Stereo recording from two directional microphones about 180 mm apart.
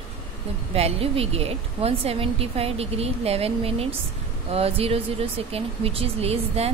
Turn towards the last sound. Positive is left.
turn(degrees=-35)  # may be behind; listen again after turning